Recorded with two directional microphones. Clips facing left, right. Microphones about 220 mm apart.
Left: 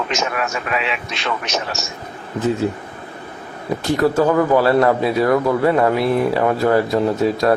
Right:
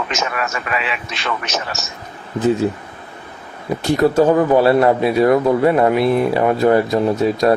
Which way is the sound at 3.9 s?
20° right (ahead or behind).